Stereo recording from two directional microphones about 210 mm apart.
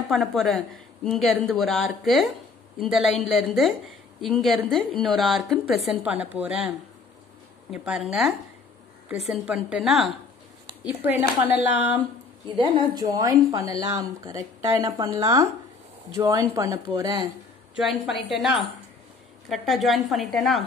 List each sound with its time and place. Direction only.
0.1 s a woman's voice: centre (ahead or behind)
7.7 s a woman's voice: 5° right (ahead or behind)
12.5 s a woman's voice: 25° right (ahead or behind)
17.7 s a woman's voice: centre (ahead or behind)